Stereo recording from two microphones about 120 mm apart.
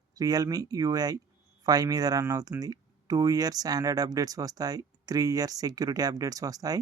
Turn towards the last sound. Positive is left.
turn(degrees=-30)  # may be behind; listen again after turning